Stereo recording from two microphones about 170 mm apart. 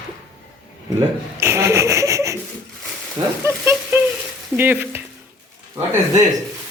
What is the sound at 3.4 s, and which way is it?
Speech, 15° right (ahead or behind).